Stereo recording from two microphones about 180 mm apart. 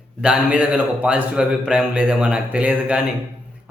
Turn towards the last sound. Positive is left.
turn(degrees=-5)  # may be behind; listen again after turning